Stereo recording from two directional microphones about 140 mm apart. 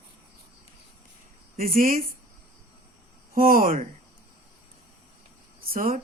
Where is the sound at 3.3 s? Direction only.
90° right.